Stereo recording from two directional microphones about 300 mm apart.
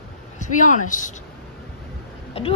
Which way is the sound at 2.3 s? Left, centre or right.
Centre.